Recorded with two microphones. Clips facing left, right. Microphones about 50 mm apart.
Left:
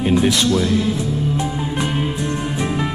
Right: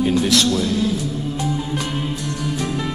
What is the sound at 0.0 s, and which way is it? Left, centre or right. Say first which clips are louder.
Speech: left 1 dB; left.